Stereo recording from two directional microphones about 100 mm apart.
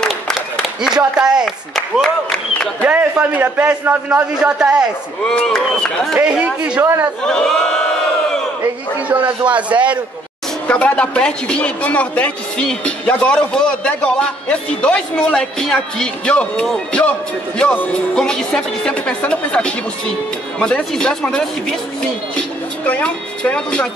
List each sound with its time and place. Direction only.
0.0 s a sound: 5° left (ahead or behind)
1.1 s a man's voice: 5° right (ahead or behind)
2.8 s a man's voice: 15° right (ahead or behind)
5.2 s a man's voice: 10° left (ahead or behind)
6.1 s a man's voice: 10° right (ahead or behind)
6.8 s a man's voice: 20° right (ahead or behind)
7.2 s a man's voice: 5° left (ahead or behind)
9.5 s a man's voice: 15° right (ahead or behind)
10.7 s a man's voice: 10° left (ahead or behind)
22.8 s a man's voice: 15° left (ahead or behind)